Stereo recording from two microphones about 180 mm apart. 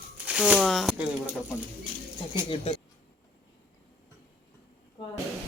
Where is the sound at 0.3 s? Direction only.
5° right (ahead or behind).